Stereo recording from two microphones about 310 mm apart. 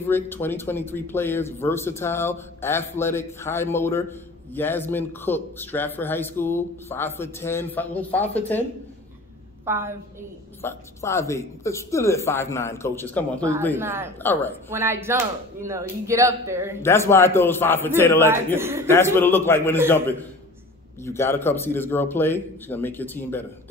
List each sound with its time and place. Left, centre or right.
0.0 s a man's voice: centre
9.7 s speech: centre
10.6 s a man's voice: centre
13.7 s speech: centre
14.2 s a man's voice: centre
14.7 s speech: centre
16.8 s a man's voice: centre
18.3 s speech: centre
18.9 s a man's voice: centre
21.0 s a man's voice: centre